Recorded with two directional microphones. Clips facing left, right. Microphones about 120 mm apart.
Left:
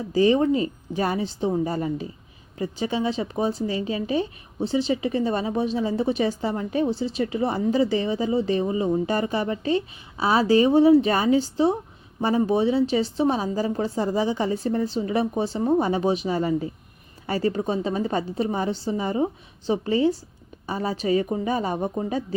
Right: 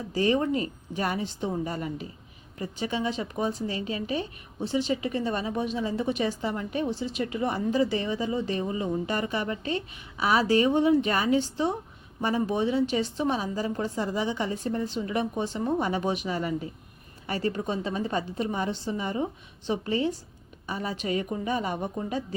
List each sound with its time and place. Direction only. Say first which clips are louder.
0.1 s speech: left 6 dB; 30° left (ahead or behind)